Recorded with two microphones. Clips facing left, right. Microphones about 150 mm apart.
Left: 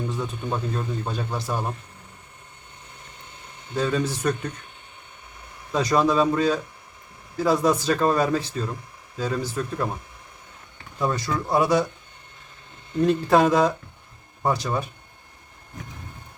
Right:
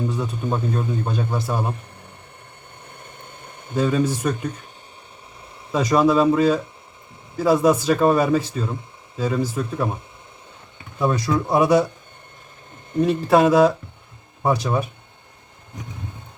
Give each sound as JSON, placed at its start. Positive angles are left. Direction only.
{"t": 0.2, "sound": "a man's voice", "side_deg": -10}
{"t": 3.0, "sound": "a sound", "side_deg": -55}
{"t": 3.8, "sound": "a man's voice", "side_deg": -10}
{"t": 5.7, "sound": "a man's voice", "side_deg": -10}
{"t": 11.0, "sound": "a man's voice", "side_deg": -10}
{"t": 13.0, "sound": "a man's voice", "side_deg": -5}